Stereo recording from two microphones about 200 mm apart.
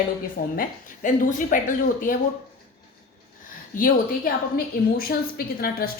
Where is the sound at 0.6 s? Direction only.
40° left (ahead or behind).